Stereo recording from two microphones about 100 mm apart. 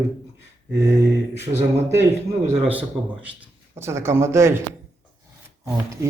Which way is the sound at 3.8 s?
25° right (ahead or behind).